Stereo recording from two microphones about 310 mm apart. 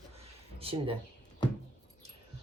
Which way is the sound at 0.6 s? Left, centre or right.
Centre.